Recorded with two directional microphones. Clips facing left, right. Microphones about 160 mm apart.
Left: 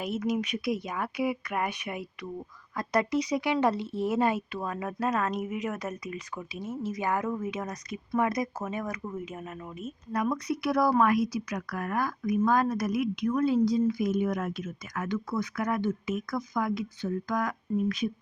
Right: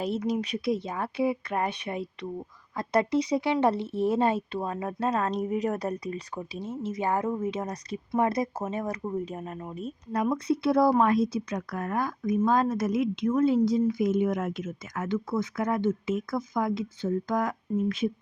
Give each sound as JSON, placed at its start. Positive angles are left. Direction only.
{"t": 0.0, "sound": "speech", "side_deg": -30}